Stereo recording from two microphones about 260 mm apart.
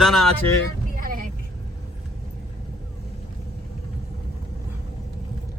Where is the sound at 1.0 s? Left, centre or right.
Right.